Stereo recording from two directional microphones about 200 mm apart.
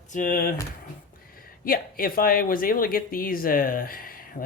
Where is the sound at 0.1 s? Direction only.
40° left (ahead or behind).